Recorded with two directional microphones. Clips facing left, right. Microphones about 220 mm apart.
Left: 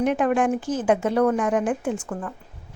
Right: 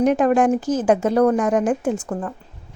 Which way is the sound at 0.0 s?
40° right (ahead or behind).